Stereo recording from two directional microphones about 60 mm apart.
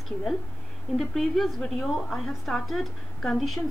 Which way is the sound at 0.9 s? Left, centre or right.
Centre.